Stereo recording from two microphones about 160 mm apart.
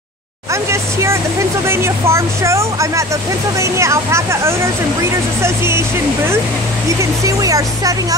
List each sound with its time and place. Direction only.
0.5 s vehicle: 15° right (ahead or behind)
1.7 s speech: 15° right (ahead or behind)
7.0 s speech: 20° right (ahead or behind)